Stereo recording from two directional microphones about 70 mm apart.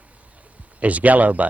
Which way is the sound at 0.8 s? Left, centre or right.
Right.